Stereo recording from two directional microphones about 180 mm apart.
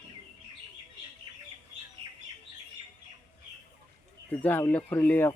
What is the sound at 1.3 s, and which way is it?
Bird, 25° right (ahead or behind).